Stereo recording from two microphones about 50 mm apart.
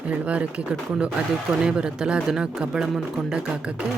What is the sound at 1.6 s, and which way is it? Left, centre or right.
Speech, centre.